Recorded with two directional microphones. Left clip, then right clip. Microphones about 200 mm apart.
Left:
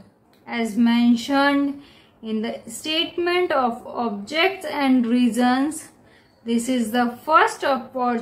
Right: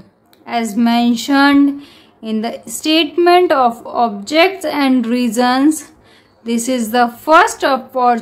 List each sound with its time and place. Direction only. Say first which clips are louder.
0.5 s speech: right 6 dB; 45° right (ahead or behind)